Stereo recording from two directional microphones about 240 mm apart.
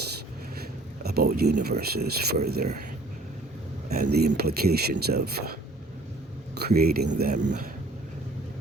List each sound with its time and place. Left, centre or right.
1.0 s speech: right
3.8 s speech: right
6.6 s speech: right